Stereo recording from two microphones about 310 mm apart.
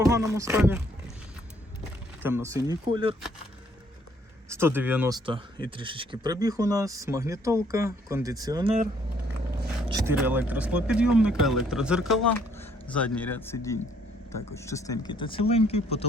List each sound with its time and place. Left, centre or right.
0.0 s speech: centre
2.2 s speech: centre
4.4 s speech: centre
9.9 s speech: centre